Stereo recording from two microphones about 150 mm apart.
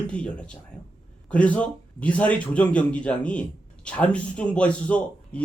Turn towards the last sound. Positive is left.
turn(degrees=10)  # may be behind; listen again after turning